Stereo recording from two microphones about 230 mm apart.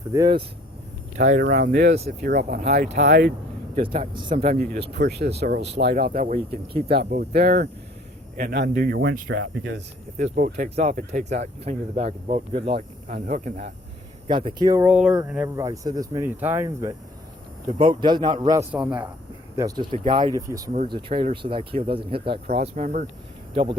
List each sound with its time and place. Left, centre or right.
0.1 s speech: centre
1.2 s speech: right
4.3 s speech: right
4.9 s speech: right
10.3 s speech: right
14.3 s speech: right
14.8 s speech: centre
18.7 s speech: centre
19.5 s speech: centre